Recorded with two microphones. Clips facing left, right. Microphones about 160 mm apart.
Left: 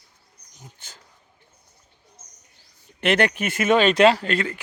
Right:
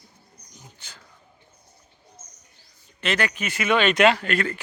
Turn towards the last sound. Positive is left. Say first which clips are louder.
# left 2 dB
turn(degrees=30)  # may be behind; listen again after turning